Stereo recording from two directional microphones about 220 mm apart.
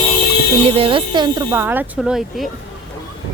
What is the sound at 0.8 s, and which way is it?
Speech, 25° right (ahead or behind).